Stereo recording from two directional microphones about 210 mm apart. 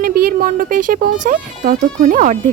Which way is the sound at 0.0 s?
45° right (ahead or behind).